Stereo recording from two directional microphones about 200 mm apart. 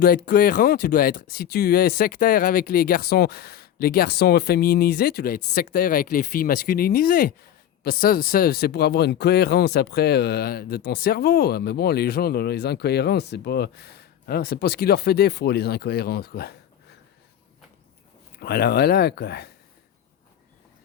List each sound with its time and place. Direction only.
0.3 s speech: 45° left (ahead or behind)
18.3 s speech: 50° left (ahead or behind)